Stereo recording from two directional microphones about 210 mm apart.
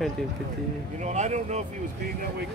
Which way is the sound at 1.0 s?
35° right (ahead or behind).